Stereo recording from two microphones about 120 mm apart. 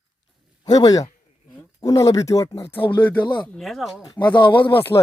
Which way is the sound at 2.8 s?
40° left (ahead or behind).